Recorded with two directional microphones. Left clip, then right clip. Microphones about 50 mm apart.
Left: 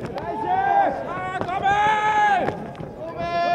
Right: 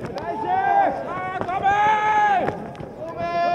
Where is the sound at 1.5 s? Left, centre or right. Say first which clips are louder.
Right 1 dB; left.